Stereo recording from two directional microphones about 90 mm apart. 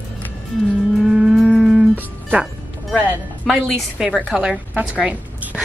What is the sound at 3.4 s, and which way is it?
A woman's voice, centre (ahead or behind).